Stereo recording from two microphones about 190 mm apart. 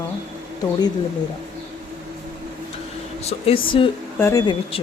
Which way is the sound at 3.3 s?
30° left (ahead or behind).